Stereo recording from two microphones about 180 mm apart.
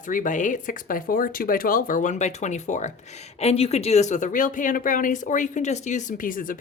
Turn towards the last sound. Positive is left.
turn(degrees=50)  # may be behind; listen again after turning